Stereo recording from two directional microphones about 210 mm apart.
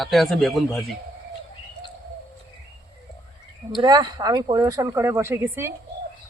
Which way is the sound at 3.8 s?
20° right (ahead or behind).